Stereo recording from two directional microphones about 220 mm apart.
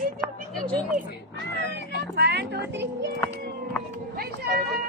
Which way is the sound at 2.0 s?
50° right (ahead or behind).